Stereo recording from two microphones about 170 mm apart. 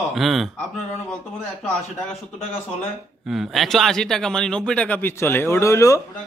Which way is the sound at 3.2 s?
Centre (ahead or behind).